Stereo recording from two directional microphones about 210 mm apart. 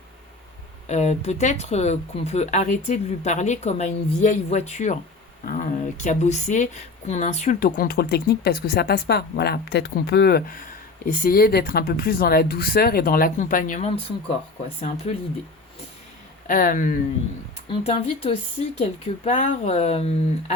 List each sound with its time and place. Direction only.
0.9 s speech: 35° left (ahead or behind)
16.5 s speech: 40° left (ahead or behind)
17.7 s speech: 30° left (ahead or behind)